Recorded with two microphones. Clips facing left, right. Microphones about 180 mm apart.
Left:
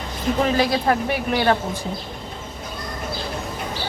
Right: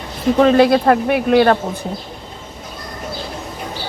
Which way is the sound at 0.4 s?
60° right (ahead or behind).